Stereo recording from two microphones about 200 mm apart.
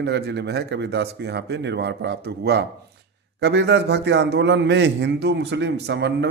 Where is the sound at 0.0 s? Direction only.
60° right (ahead or behind).